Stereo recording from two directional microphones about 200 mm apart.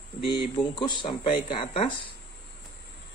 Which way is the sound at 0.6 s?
25° left (ahead or behind).